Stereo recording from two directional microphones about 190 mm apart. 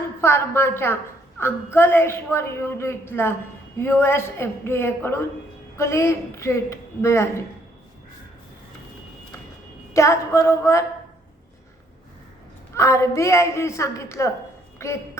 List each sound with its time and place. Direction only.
0.2 s a woman's voice: 15° left (ahead or behind)
9.9 s a woman's voice: 15° left (ahead or behind)
12.7 s a woman's voice: 15° left (ahead or behind)